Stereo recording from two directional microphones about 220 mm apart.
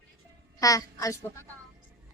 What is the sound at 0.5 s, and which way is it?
Speech, 15° left (ahead or behind).